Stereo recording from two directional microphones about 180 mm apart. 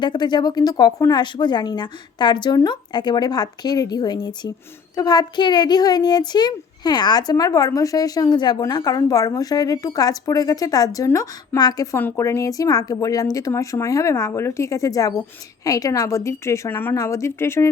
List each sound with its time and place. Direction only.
0.0 s a child's voice: 25° left (ahead or behind)